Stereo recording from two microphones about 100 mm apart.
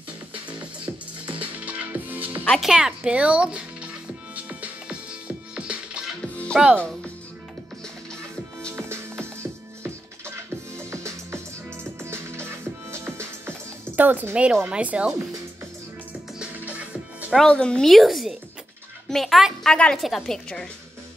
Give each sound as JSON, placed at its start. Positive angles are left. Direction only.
{"t": 0.8, "sound": "music", "side_deg": -15}
{"t": 2.6, "sound": "speech", "side_deg": -10}
{"t": 4.4, "sound": "music", "side_deg": -15}
{"t": 6.2, "sound": "music", "side_deg": 10}
{"t": 8.7, "sound": "music", "side_deg": -25}
{"t": 13.9, "sound": "speech", "side_deg": -15}
{"t": 16.3, "sound": "music", "side_deg": -15}
{"t": 17.5, "sound": "a woman's voice", "side_deg": 10}